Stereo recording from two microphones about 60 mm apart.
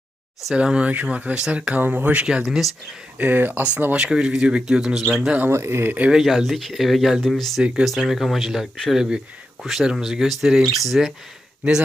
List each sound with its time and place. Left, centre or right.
0.5 s speech: centre
2.2 s speech: centre
3.2 s speech: right
3.9 s speech: centre
5.5 s speech: right
6.1 s speech: centre
7.6 s speech: centre
7.9 s speech: centre